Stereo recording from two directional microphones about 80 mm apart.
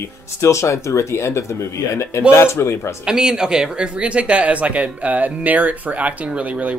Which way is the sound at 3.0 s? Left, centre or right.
Centre.